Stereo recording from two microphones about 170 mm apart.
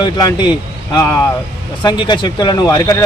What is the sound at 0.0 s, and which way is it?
Speech, 25° left (ahead or behind).